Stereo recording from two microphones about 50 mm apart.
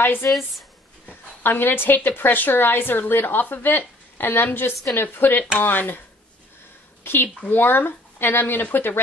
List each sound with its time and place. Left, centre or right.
0.0 s a woman's voice: left
1.4 s a woman's voice: left
7.0 s a sound: left
7.4 s a woman's voice: left